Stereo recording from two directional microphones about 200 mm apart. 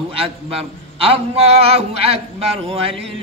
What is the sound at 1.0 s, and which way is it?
A man's voice, 30° right (ahead or behind).